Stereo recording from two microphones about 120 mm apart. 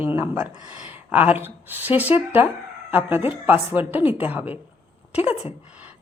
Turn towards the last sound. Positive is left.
turn(degrees=-15)  # may be behind; listen again after turning